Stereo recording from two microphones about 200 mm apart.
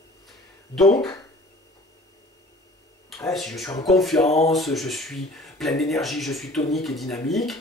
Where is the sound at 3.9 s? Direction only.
Centre (ahead or behind).